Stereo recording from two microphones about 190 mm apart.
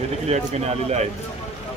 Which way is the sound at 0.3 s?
35° right (ahead or behind).